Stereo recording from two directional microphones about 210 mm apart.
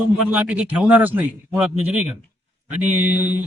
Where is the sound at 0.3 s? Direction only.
5° right (ahead or behind).